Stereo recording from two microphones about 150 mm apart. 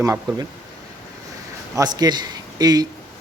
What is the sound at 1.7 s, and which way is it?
A man's voice, 25° right (ahead or behind).